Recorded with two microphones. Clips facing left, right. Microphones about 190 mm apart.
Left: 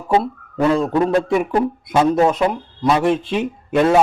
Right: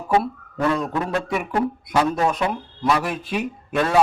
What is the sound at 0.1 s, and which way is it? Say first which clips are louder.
Speech: left 3 dB; 25° left (ahead or behind).